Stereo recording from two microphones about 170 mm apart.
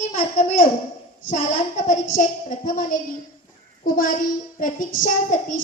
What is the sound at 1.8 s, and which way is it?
A woman's voice, 50° left (ahead or behind).